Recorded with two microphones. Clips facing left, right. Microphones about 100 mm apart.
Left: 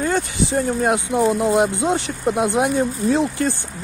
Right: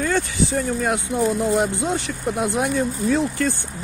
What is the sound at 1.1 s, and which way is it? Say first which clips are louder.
Speech: left 2 dB; 70° left (ahead or behind).